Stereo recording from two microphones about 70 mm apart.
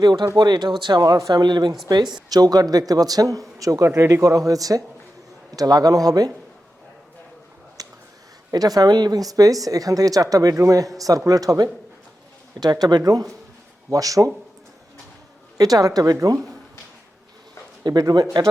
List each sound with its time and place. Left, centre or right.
0.0 s speech: right
3.8 s speech: right
7.8 s a sound: right
8.5 s speech: right
12.6 s speech: right
13.0 s speech: right
15.5 s speech: right
17.8 s speech: right